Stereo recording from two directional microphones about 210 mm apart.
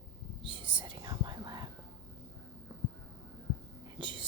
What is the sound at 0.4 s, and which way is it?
Whispering, 25° right (ahead or behind).